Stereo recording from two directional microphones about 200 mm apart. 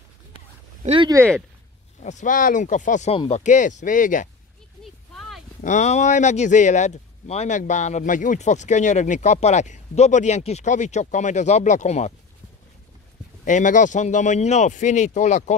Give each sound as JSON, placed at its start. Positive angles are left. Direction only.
{"t": 0.8, "sound": "speech", "side_deg": -25}
{"t": 2.0, "sound": "speech", "side_deg": 35}
{"t": 5.6, "sound": "speech", "side_deg": 35}
{"t": 13.5, "sound": "speech", "side_deg": 40}